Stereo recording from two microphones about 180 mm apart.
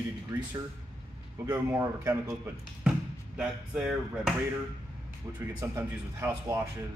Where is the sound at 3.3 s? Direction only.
5° right (ahead or behind).